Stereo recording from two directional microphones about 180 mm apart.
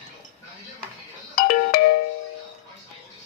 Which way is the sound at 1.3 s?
55° left (ahead or behind).